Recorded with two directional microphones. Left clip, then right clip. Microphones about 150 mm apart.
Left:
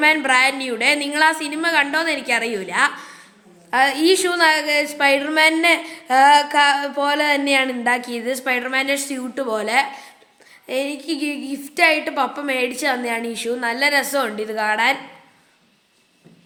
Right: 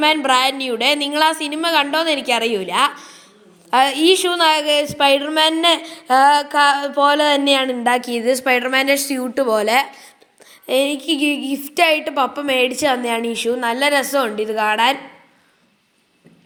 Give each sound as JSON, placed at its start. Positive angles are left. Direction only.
{"t": 0.0, "sound": "a woman's voice", "side_deg": -30}
{"t": 3.7, "sound": "a woman's voice", "side_deg": -45}